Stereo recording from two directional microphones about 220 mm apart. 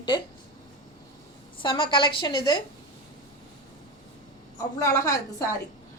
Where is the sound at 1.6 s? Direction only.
20° left (ahead or behind).